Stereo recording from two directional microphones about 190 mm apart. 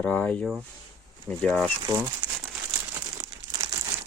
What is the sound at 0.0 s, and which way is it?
Speech, 10° left (ahead or behind).